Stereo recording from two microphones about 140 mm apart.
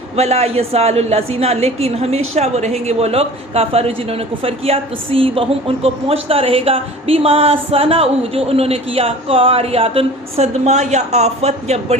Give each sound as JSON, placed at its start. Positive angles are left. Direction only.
{"t": 0.2, "sound": "a woman's voice", "side_deg": -50}